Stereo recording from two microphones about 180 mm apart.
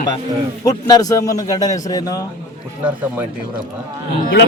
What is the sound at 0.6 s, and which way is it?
A man's voice, 20° left (ahead or behind).